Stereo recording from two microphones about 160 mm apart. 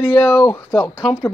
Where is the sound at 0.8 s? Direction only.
5° right (ahead or behind).